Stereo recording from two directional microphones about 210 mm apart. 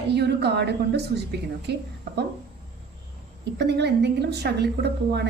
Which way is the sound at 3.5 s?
55° right (ahead or behind).